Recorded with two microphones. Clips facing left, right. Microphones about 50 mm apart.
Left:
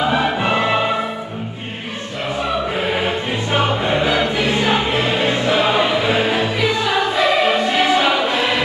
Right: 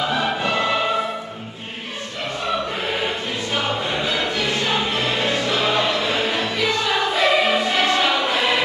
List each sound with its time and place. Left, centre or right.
0.1 s music: left
3.5 s music: left; by 8.6 s centre